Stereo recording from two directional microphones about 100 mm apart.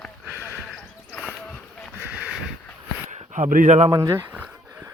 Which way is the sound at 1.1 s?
15° left (ahead or behind).